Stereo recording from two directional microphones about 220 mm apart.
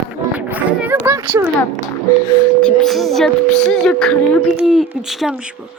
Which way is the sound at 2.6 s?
5° left (ahead or behind).